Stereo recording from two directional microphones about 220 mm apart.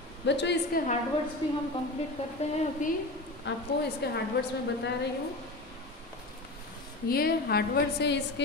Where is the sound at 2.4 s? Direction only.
30° left (ahead or behind).